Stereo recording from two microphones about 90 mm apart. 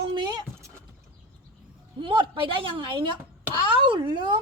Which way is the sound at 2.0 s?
70° right (ahead or behind).